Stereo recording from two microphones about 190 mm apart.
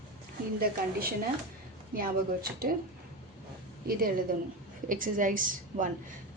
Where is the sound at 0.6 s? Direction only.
50° right (ahead or behind).